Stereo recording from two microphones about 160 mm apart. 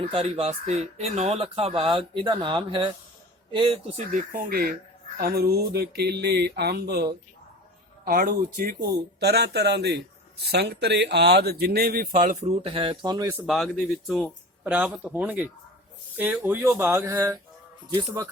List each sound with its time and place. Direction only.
0.0 s speech: 35° right (ahead or behind)
3.9 s speech: 55° right (ahead or behind)
5.2 s speech: 75° right (ahead or behind)
8.0 s speech: 65° right (ahead or behind)
12.6 s speech: 35° right (ahead or behind)
13.5 s speech: centre (ahead or behind)
14.6 s speech: 10° right (ahead or behind)